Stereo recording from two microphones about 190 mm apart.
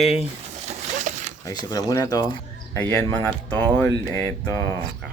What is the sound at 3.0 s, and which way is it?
Speech, 10° left (ahead or behind).